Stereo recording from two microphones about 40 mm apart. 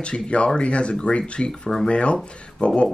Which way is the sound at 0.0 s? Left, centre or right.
Left.